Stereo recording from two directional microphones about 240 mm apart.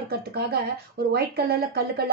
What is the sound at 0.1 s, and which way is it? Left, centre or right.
Speech, right.